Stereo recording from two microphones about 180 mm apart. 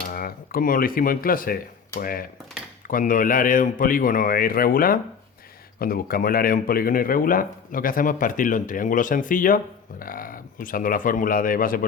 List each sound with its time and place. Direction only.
0.1 s speech: 55° left (ahead or behind)